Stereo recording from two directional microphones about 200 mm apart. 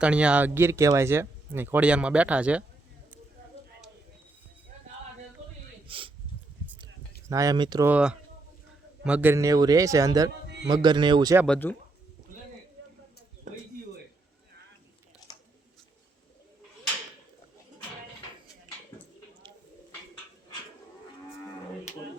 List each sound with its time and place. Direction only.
0.0 s speech: 5° right (ahead or behind)
5.9 s speech: 25° right (ahead or behind)
7.3 s speech: 15° right (ahead or behind)
7.9 s speech: 5° right (ahead or behind); by 11.3 s 20° right (ahead or behind)
11.4 s speech: 5° left (ahead or behind)
13.5 s a sound: 40° right (ahead or behind)